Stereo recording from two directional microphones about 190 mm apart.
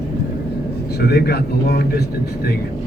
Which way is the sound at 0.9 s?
55° left (ahead or behind).